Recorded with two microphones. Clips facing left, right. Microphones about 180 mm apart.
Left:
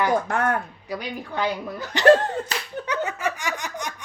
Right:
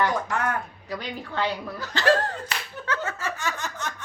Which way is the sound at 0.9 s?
10° left (ahead or behind).